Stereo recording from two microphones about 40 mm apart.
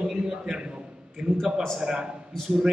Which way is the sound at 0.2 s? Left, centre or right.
Right.